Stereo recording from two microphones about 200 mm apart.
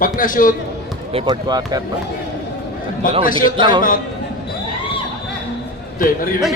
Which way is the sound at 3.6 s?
25° right (ahead or behind).